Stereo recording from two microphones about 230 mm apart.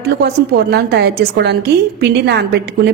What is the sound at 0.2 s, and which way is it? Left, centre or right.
A woman's voice, right.